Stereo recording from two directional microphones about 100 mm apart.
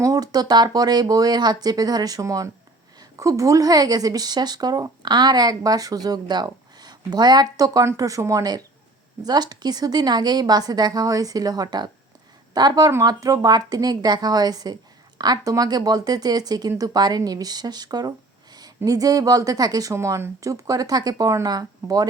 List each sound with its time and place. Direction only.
0.0 s a woman's voice: 40° right (ahead or behind)